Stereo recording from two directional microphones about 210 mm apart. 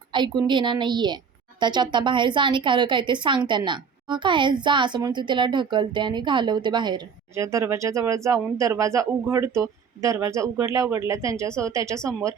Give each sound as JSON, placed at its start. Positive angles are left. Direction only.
{"t": 0.1, "sound": "a woman's voice", "side_deg": -20}